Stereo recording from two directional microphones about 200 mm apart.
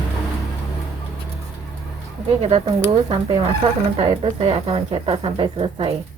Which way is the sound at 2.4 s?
30° right (ahead or behind).